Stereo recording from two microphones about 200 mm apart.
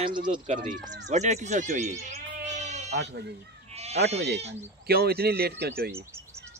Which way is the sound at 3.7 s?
35° right (ahead or behind).